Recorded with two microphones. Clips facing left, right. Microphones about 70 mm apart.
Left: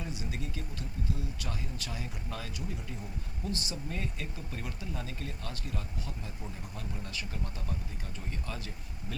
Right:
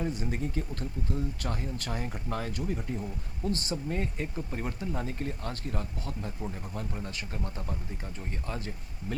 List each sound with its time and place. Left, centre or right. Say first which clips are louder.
0.0 s speech: right 7 dB; right
3.8 s speech: right 5 dB; right
6.9 s speech: right 3 dB; right